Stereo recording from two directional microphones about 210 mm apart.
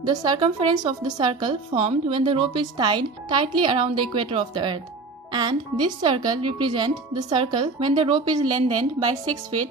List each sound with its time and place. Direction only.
0.0 s a woman's voice: 20° right (ahead or behind)
9.2 s a woman's voice: 90° right